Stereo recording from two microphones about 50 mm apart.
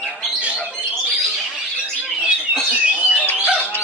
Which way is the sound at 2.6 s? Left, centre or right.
Centre.